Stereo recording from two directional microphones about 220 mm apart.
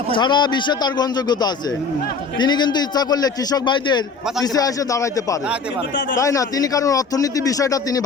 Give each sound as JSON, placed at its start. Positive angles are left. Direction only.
{"t": 0.1, "sound": "a man's voice", "side_deg": 20}